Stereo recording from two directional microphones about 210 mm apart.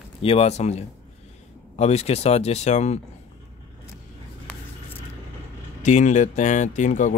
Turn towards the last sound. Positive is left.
turn(degrees=35)  # may be behind; listen again after turning